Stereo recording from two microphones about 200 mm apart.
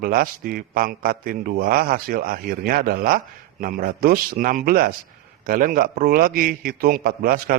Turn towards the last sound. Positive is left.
turn(degrees=-45)  # may be behind; listen again after turning